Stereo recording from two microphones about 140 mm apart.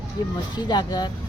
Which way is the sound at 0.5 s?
30° left (ahead or behind).